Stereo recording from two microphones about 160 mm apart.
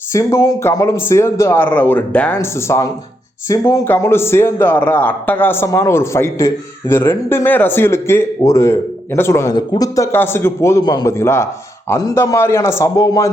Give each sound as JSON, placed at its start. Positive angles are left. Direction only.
{"t": 0.1, "sound": "a man's voice", "side_deg": 20}